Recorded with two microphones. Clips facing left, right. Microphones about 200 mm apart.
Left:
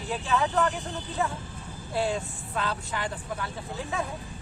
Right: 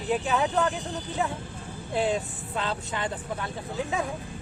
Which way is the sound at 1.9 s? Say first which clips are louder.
Right 2 dB; 20° right (ahead or behind).